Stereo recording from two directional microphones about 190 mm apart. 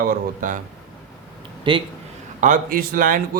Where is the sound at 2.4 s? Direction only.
45° right (ahead or behind).